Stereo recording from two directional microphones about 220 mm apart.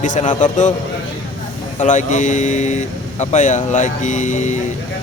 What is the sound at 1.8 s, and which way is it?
Speech, 35° left (ahead or behind).